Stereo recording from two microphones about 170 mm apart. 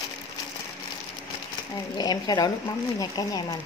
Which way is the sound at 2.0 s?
25° left (ahead or behind).